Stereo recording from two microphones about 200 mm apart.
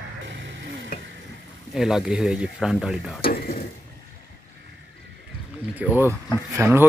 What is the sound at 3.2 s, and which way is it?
Stir, 50° left (ahead or behind).